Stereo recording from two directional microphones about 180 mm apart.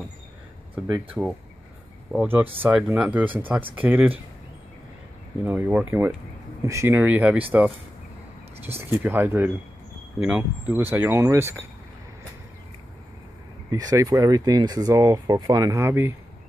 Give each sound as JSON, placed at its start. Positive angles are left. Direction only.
{"t": 0.8, "sound": "speech", "side_deg": -20}
{"t": 2.1, "sound": "speech", "side_deg": -10}
{"t": 5.4, "sound": "speech", "side_deg": -10}
{"t": 8.6, "sound": "speech", "side_deg": -10}
{"t": 13.7, "sound": "speech", "side_deg": -20}